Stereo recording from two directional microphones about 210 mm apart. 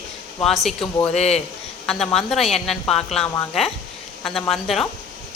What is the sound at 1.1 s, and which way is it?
Speech, 30° left (ahead or behind).